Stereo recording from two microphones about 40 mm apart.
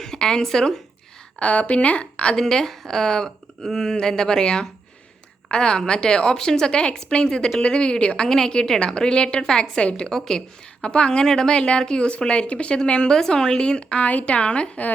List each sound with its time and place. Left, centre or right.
0.0 s a sound: centre
0.4 s a woman's voice: centre
1.4 s a woman's voice: left
2.3 s a woman's voice: centre
10.8 s a woman's voice: left
14.0 s a woman's voice: left